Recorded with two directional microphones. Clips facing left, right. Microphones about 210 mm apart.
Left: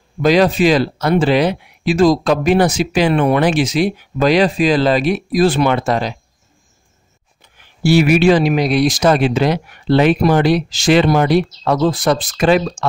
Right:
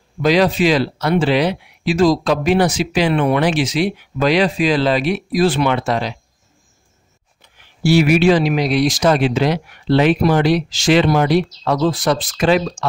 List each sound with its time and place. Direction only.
0.2 s speech: 45° left (ahead or behind)
7.5 s speech: 50° left (ahead or behind)